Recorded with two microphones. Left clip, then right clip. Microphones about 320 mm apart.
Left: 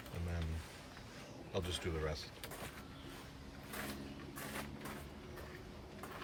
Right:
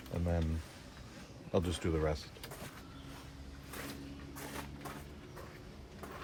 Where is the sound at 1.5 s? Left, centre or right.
Centre.